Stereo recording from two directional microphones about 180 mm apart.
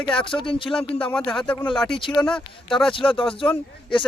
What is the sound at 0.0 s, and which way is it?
Speech, 5° left (ahead or behind).